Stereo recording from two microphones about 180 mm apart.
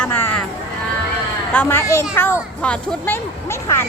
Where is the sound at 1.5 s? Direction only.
15° left (ahead or behind).